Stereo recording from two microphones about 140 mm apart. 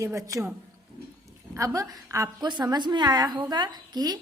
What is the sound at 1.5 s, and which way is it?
A woman's voice, 25° right (ahead or behind).